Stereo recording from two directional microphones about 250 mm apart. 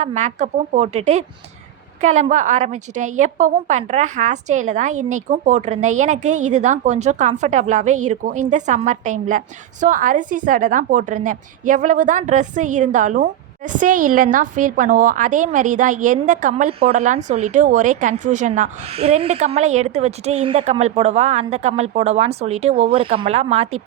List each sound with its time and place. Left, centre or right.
0.0 s a woman's voice: right